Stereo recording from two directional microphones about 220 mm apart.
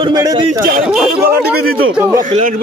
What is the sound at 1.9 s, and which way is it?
Speech, 10° right (ahead or behind).